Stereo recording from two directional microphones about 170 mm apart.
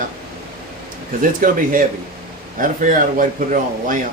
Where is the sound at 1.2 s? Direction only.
55° right (ahead or behind).